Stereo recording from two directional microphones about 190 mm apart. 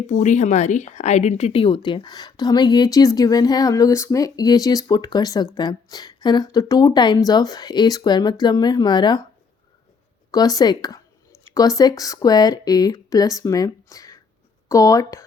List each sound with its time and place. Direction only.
0.1 s speech: 40° left (ahead or behind); by 9.2 s 25° left (ahead or behind)
10.3 s speech: 20° left (ahead or behind)